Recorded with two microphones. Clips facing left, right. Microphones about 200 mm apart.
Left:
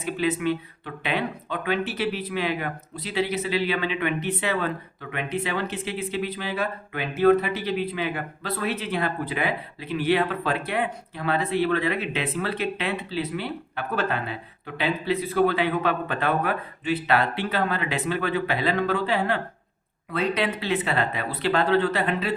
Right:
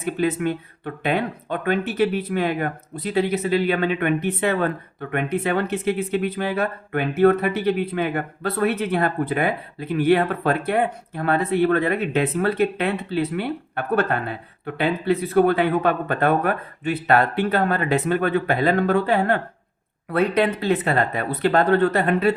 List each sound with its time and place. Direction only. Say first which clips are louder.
0.0 s speech: right 3 dB; 50° right (ahead or behind)